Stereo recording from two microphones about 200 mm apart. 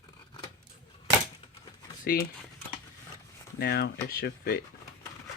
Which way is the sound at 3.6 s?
55° left (ahead or behind).